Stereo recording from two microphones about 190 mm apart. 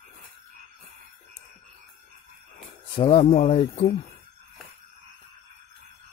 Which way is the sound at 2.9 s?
30° left (ahead or behind).